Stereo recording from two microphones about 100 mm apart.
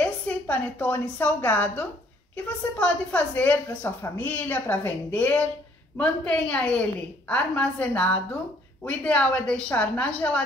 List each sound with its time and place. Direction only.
0.0 s a woman's voice: 15° left (ahead or behind)
3.8 s a woman's voice: 25° left (ahead or behind); by 10.4 s 10° left (ahead or behind)